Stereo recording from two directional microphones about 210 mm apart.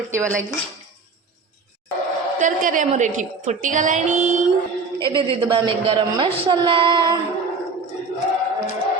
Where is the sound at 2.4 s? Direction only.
40° right (ahead or behind).